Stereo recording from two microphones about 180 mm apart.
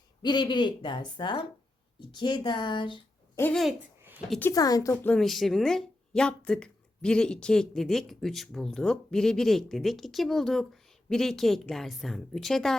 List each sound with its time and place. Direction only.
0.2 s a woman's voice: 25° left (ahead or behind)
3.3 s speech: 10° left (ahead or behind)
3.6 s speech: centre (ahead or behind)
4.3 s a woman's voice: 10° left (ahead or behind)
5.1 s speech: centre (ahead or behind)